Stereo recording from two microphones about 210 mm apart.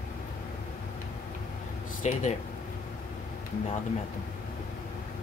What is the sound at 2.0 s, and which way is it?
Speech, 35° left (ahead or behind).